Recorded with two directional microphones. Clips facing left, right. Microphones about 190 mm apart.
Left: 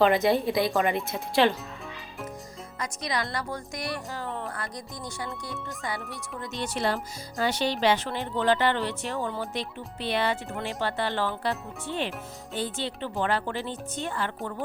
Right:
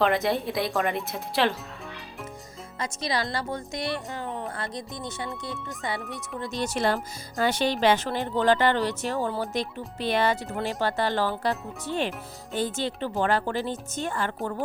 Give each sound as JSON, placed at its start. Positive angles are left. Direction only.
{"t": 0.0, "sound": "speech", "side_deg": 0}
{"t": 2.7, "sound": "speech", "side_deg": -30}
{"t": 5.5, "sound": "speech", "side_deg": 0}
{"t": 6.4, "sound": "speech", "side_deg": -40}